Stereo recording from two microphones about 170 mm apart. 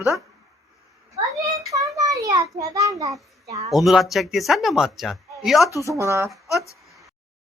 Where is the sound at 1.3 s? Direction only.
20° right (ahead or behind).